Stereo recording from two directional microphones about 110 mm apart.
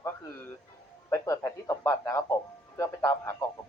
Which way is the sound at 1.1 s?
25° left (ahead or behind).